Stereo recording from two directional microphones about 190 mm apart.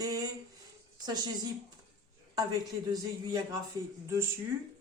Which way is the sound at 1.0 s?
20° right (ahead or behind).